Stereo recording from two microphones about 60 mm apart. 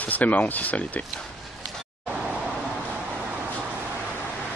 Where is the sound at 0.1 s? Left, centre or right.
Left.